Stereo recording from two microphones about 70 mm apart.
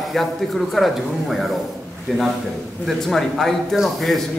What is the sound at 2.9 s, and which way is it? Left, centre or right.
Speech, centre.